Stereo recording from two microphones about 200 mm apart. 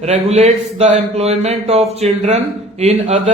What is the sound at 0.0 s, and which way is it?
A man's voice, 35° right (ahead or behind).